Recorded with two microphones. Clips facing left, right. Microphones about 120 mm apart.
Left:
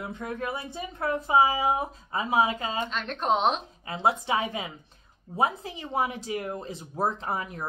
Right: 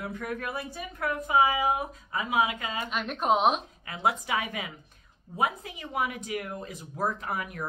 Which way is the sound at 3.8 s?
30° left (ahead or behind).